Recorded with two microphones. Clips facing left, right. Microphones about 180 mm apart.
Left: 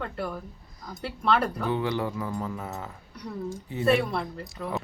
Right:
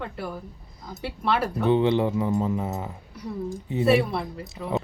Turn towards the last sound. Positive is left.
turn(degrees=-5)  # may be behind; listen again after turning